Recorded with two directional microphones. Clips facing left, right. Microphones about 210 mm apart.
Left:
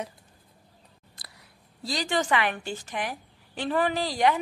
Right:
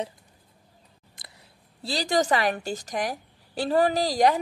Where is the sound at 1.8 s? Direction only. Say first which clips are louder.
Right 3 dB; 30° right (ahead or behind).